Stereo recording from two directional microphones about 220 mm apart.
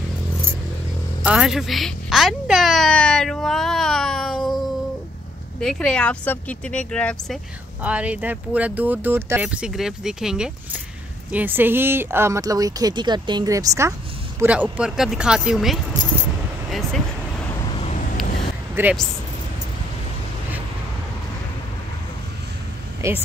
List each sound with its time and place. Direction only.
1.2 s speech: centre (ahead or behind)
5.6 s speech: 5° left (ahead or behind)
7.8 s speech: 5° right (ahead or behind)
17.5 s vehicle: 20° left (ahead or behind)
18.8 s speech: 10° right (ahead or behind)
23.0 s speech: 15° right (ahead or behind)